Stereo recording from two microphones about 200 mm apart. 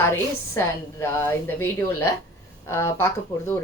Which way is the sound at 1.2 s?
10° left (ahead or behind).